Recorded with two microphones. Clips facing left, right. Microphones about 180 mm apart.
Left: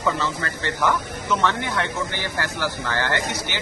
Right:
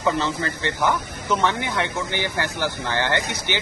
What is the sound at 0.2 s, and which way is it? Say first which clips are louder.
Speech: right 2 dB; 20° right (ahead or behind).